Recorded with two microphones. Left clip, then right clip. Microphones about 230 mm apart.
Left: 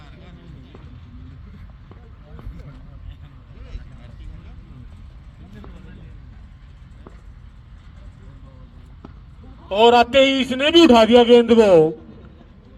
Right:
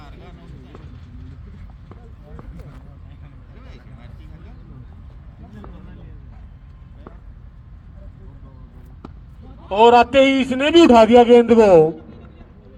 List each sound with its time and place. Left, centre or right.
0.0 s music: right
9.6 s a man's voice: left